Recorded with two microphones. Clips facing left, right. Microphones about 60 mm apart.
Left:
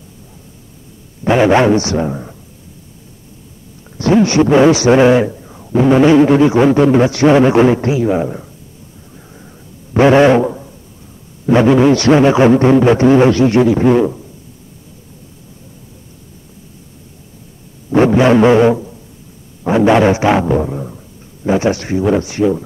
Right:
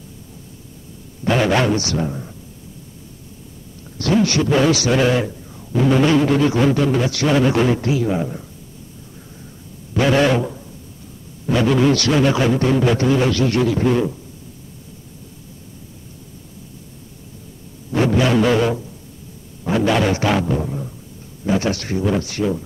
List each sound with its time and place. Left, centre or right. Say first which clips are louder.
1.2 s a man's voice: left 7 dB; left
3.8 s a man's voice: left 6 dB; left
9.9 s a man's voice: left 8 dB; left
17.9 s a man's voice: left 7 dB; left